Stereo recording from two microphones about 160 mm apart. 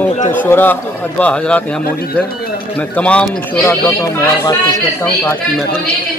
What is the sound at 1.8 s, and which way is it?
Speech, 70° left (ahead or behind).